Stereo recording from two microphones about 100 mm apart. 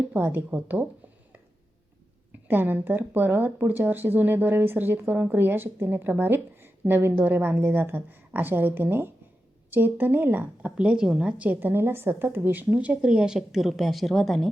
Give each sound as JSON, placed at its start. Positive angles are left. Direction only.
{"t": 0.1, "sound": "speech", "side_deg": -20}
{"t": 2.5, "sound": "a woman's voice", "side_deg": -20}